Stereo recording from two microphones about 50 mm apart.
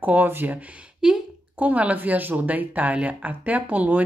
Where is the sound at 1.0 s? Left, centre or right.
Centre.